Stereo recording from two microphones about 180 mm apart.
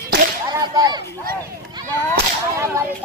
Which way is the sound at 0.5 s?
20° right (ahead or behind).